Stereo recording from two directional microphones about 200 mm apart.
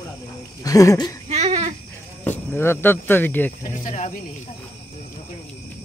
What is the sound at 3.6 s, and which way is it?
Speech, 35° left (ahead or behind).